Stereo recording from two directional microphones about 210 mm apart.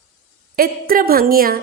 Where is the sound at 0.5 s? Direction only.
45° right (ahead or behind).